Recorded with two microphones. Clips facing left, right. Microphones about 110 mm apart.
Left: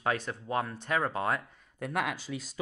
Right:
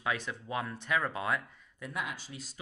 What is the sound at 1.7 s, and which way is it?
Speech, 65° left (ahead or behind).